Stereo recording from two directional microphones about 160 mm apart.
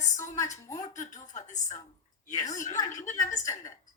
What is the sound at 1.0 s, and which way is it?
Speech, 50° left (ahead or behind).